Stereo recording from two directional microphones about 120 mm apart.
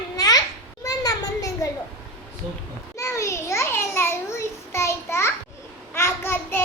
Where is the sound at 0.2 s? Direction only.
30° left (ahead or behind).